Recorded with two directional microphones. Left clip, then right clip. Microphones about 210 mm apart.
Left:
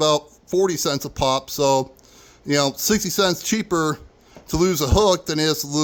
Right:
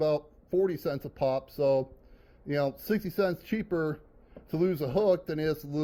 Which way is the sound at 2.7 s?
30° left (ahead or behind).